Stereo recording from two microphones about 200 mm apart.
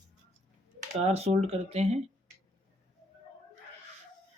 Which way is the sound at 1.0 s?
30° right (ahead or behind).